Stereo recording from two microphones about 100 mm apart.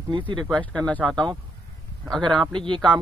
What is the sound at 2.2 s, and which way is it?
Speech, 50° right (ahead or behind).